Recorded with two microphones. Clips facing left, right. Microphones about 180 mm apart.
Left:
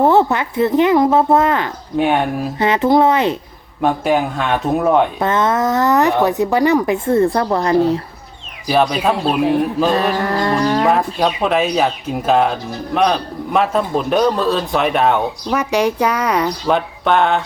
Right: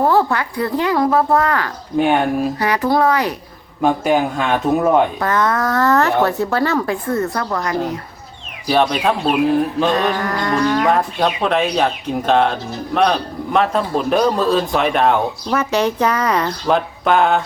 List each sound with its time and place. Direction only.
0.0 s speech: 25° left (ahead or behind)
2.0 s speech: centre (ahead or behind)
2.6 s speech: 25° left (ahead or behind)
3.8 s speech: centre (ahead or behind)
5.2 s speech: 25° left (ahead or behind)
8.6 s speech: centre (ahead or behind)
9.9 s livestock: 30° left (ahead or behind)
10.8 s speech: centre (ahead or behind)
16.6 s speech: centre (ahead or behind)